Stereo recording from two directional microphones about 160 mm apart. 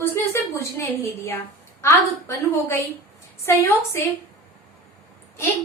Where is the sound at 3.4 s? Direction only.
15° left (ahead or behind).